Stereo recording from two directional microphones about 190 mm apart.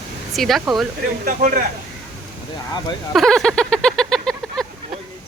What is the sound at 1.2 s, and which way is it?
Speech, 45° right (ahead or behind).